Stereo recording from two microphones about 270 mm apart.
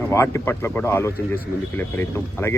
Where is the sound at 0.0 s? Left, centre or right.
Centre.